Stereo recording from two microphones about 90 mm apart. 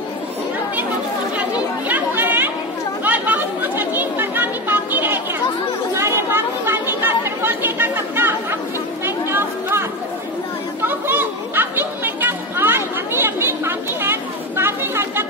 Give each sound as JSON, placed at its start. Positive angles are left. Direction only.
{"t": 1.9, "sound": "chatter", "side_deg": -20}